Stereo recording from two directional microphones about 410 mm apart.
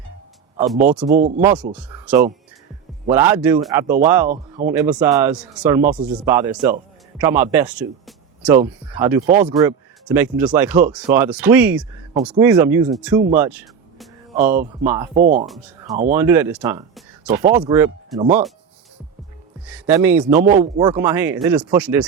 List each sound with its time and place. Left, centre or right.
1.4 s speech: centre
4.3 s speech: centre
4.9 s speech: centre
14.8 s speech: centre
15.2 s speech: centre
15.4 s speech: centre
19.6 s speech: centre